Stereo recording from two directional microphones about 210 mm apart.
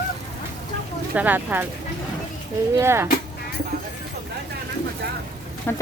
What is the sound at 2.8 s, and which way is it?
Speech, 10° right (ahead or behind).